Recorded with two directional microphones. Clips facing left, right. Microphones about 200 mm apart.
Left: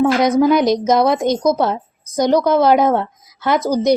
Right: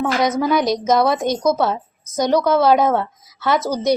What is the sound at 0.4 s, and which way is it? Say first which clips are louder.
A child's voice: left 4 dB; 20° left (ahead or behind).